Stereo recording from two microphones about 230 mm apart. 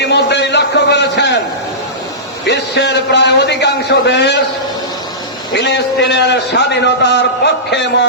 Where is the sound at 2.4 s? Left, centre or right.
Left.